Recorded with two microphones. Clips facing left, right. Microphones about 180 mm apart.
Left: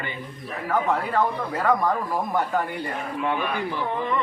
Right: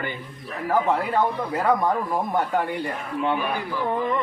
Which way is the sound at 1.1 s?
20° right (ahead or behind).